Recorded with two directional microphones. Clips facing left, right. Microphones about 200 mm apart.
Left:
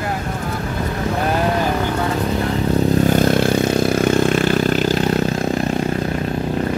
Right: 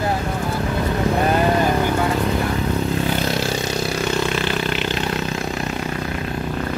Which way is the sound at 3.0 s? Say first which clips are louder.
Left 7 dB; 50° left (ahead or behind).